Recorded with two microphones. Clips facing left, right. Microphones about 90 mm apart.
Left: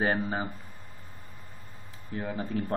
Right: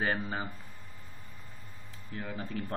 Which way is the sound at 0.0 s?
15° left (ahead or behind).